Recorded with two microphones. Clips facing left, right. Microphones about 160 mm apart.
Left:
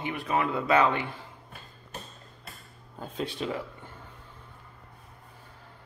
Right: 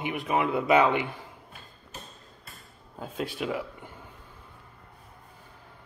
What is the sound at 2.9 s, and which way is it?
Speech, 5° right (ahead or behind).